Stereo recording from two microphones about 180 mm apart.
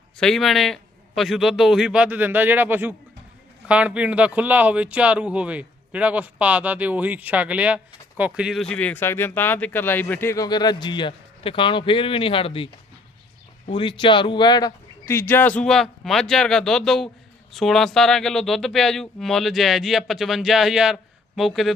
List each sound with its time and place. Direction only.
0.2 s speech: centre (ahead or behind)